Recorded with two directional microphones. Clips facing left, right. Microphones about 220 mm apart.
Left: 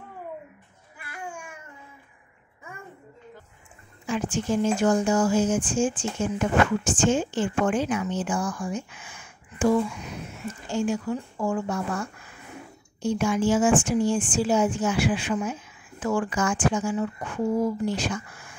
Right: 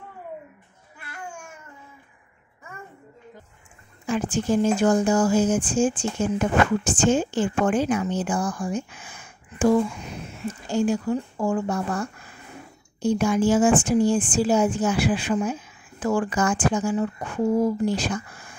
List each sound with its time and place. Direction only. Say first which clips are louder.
4.1 s speech: right 3 dB; 35° right (ahead or behind)